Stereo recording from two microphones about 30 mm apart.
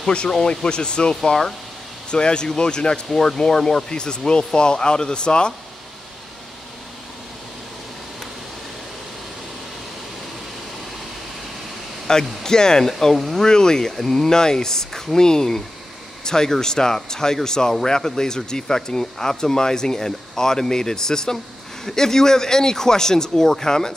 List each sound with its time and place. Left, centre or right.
0.7 s speech: left; by 3.8 s centre
3.9 s speech: left
12.1 s speech: left
12.8 s speech: centre
13.4 s speech: left